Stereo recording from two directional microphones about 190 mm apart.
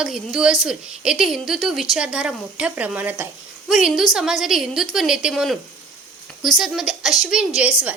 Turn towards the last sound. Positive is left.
turn(degrees=-5)  # may be behind; listen again after turning